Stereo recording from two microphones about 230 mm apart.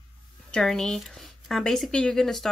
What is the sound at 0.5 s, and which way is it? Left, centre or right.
Speech, centre.